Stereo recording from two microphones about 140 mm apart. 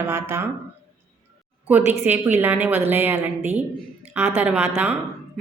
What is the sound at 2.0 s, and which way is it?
A woman's voice, 15° right (ahead or behind).